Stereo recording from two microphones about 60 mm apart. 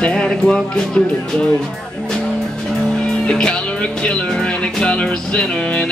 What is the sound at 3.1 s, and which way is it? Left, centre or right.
Music, centre.